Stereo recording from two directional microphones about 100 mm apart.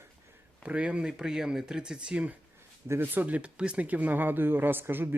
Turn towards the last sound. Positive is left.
turn(degrees=-20)  # may be behind; listen again after turning